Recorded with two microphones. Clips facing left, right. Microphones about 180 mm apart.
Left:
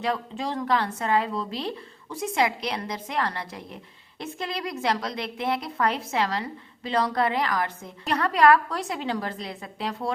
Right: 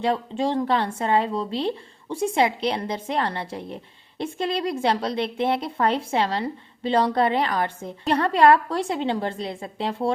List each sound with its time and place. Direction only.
0.0 s a woman's voice: 30° right (ahead or behind)